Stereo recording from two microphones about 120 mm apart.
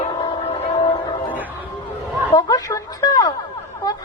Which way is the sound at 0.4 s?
60° left (ahead or behind).